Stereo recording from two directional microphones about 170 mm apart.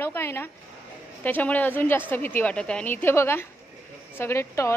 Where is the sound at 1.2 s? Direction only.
10° left (ahead or behind).